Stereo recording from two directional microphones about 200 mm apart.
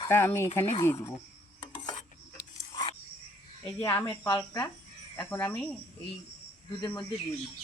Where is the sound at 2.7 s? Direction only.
25° left (ahead or behind).